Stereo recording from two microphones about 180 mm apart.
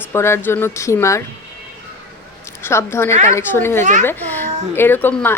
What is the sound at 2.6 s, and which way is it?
Speech, 15° left (ahead or behind).